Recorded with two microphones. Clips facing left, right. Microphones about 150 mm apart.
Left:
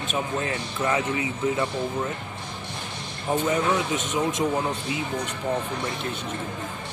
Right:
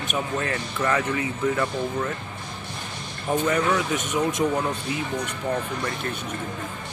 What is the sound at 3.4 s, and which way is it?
Speech, 20° left (ahead or behind).